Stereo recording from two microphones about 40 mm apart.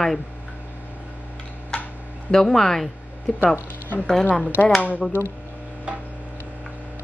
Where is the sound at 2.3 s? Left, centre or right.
Centre.